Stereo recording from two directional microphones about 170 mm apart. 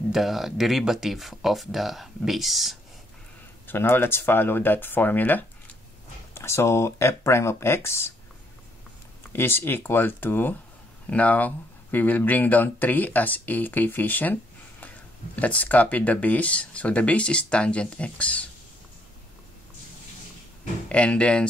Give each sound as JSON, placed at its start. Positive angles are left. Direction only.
{"t": 0.1, "sound": "speech", "side_deg": 0}
{"t": 3.6, "sound": "speech", "side_deg": 10}
{"t": 9.3, "sound": "speech", "side_deg": 15}
{"t": 20.9, "sound": "speech", "side_deg": 5}